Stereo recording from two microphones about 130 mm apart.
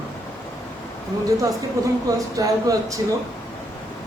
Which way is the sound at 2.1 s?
25° right (ahead or behind).